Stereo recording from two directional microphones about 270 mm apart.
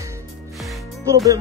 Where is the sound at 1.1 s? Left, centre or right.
Centre.